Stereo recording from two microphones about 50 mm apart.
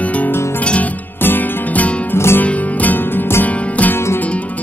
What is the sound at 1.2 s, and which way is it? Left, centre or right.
Music, left.